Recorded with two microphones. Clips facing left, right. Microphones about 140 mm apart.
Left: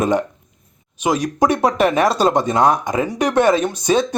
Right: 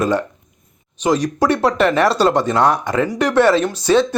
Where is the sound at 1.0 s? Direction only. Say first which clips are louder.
Right 1 dB; 10° left (ahead or behind).